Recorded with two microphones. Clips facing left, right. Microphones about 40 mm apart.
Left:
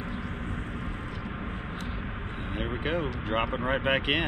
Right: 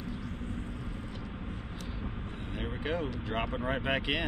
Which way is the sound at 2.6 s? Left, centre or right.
Left.